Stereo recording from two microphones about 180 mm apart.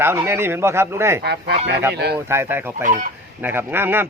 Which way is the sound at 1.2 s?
65° right (ahead or behind).